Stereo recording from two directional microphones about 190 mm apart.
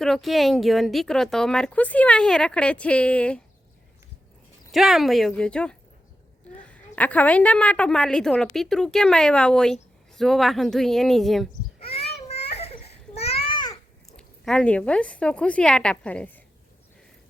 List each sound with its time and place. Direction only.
0.0 s a woman's voice: centre (ahead or behind)
4.7 s a woman's voice: centre (ahead or behind)
11.8 s a sound: 30° left (ahead or behind)
13.1 s babbling: 30° left (ahead or behind)
14.2 s speech: 5° left (ahead or behind)